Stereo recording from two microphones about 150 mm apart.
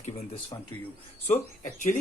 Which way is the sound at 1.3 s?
60° left (ahead or behind).